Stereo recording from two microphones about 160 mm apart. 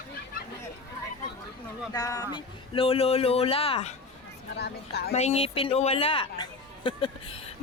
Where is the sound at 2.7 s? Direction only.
35° left (ahead or behind).